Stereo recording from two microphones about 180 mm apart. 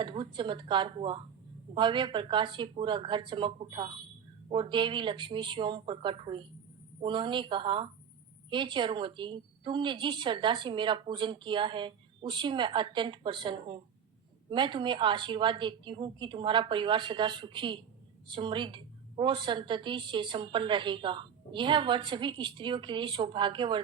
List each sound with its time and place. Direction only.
0.0 s a woman's voice: 25° right (ahead or behind)